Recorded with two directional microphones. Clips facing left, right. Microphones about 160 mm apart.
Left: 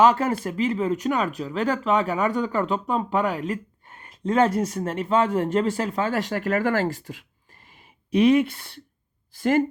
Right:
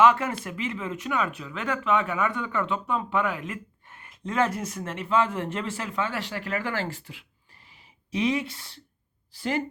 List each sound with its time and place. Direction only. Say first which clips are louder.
0.0 s speech: left 2 dB; 35° left (ahead or behind)
7.7 s a sound: left 9 dB; 55° left (ahead or behind)
9.3 s speech: left 8 dB; 50° left (ahead or behind)